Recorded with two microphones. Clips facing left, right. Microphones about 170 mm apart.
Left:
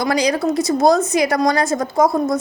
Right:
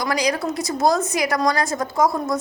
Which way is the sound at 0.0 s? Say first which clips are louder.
Left 4 dB; 25° left (ahead or behind).